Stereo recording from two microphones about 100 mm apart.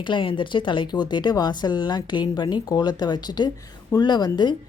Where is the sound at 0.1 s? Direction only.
55° left (ahead or behind).